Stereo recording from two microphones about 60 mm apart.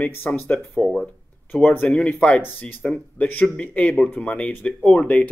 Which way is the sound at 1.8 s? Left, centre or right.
Centre.